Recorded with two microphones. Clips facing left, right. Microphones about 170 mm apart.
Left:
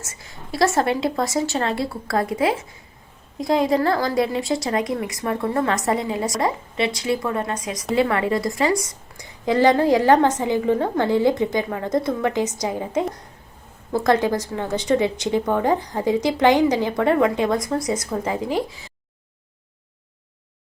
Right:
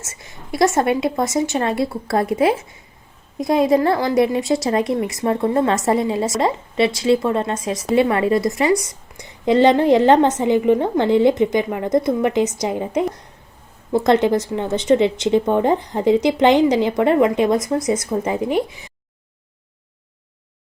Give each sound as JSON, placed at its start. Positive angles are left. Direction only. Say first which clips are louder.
{"t": 0.0, "sound": "a woman's voice", "louder": "right 1 dB", "side_deg": -25}